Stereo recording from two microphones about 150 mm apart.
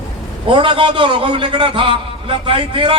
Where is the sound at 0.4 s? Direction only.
35° right (ahead or behind).